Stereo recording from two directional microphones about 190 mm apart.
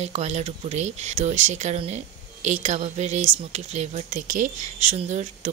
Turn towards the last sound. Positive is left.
turn(degrees=-35)  # may be behind; listen again after turning